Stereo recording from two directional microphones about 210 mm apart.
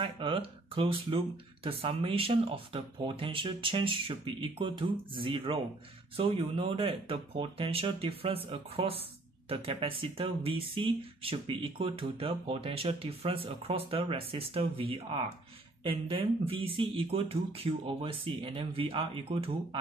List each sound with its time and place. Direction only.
0.0 s speech: 25° right (ahead or behind)